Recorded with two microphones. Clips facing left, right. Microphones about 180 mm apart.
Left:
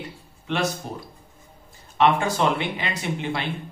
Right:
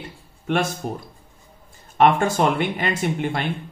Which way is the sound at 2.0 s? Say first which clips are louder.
Right 3 dB; 50° right (ahead or behind).